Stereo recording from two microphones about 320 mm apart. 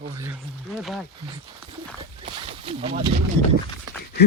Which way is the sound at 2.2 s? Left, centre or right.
Centre.